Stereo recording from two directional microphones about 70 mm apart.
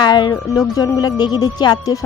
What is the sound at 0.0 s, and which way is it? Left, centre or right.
Speech, left.